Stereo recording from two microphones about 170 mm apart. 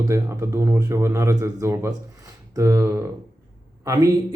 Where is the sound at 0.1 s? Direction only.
15° right (ahead or behind).